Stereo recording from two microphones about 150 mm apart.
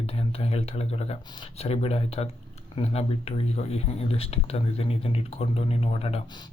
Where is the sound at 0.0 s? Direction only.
40° left (ahead or behind).